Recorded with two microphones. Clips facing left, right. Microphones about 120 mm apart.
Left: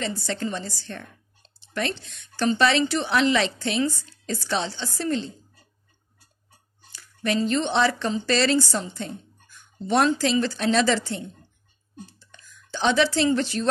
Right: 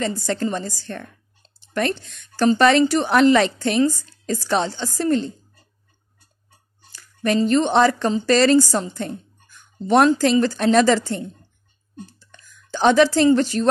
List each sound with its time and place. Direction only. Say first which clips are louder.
0.0 s speech: right 5 dB; 45° right (ahead or behind)
6.9 s a woman's voice: right 5 dB; 45° right (ahead or behind)
12.5 s a woman's voice: right 6 dB; 50° right (ahead or behind)